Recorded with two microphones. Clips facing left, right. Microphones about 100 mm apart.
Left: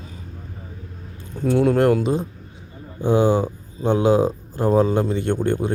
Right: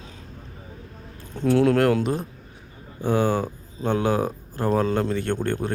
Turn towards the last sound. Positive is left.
turn(degrees=15)  # may be behind; listen again after turning